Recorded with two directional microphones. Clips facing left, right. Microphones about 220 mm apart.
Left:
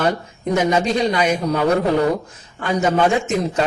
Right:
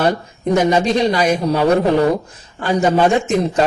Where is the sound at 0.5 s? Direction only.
35° right (ahead or behind).